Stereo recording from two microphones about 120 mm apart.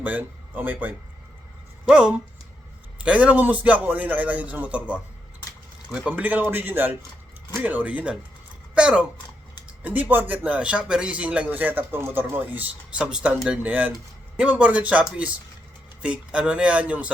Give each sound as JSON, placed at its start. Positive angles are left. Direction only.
{"t": 0.0, "sound": "speech", "side_deg": -15}
{"t": 6.1, "sound": "speech", "side_deg": -15}